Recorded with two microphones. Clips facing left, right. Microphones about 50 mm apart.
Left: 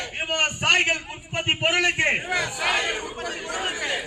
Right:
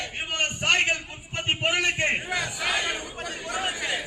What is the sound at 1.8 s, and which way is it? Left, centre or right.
Speech, centre.